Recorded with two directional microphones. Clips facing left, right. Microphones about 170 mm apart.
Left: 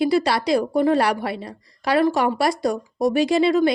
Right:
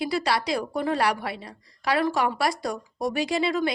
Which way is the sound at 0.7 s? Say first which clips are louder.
Left 4 dB; 25° left (ahead or behind).